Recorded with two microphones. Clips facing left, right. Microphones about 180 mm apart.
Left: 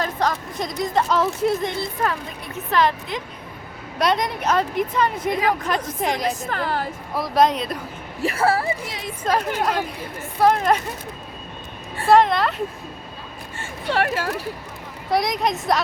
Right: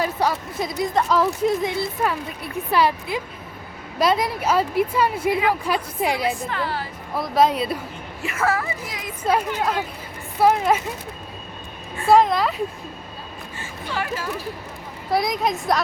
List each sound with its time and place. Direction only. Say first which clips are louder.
0.0 s a woman's voice: right 1 dB; 10° right (ahead or behind)
6.2 s a woman's voice: even; 45° left (ahead or behind)
7.1 s speech: even; centre (ahead or behind)
8.2 s a woman's voice: left 3 dB; 35° left (ahead or behind)
9.2 s a woman's voice: even; 5° right (ahead or behind)
12.0 s speech: even; centre (ahead or behind)
13.9 s speech: left 5 dB; 70° left (ahead or behind)
15.1 s speech: even; centre (ahead or behind)